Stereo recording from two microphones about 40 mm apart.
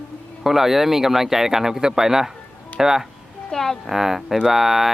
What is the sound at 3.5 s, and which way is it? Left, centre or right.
Speech, centre.